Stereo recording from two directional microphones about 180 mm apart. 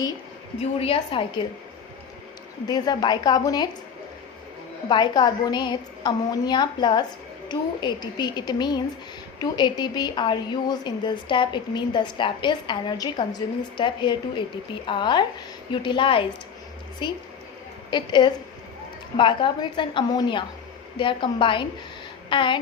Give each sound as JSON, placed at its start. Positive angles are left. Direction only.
{"t": 0.6, "sound": "a woman's voice", "side_deg": 35}
{"t": 2.6, "sound": "a woman's voice", "side_deg": 20}
{"t": 4.9, "sound": "a woman's voice", "side_deg": 25}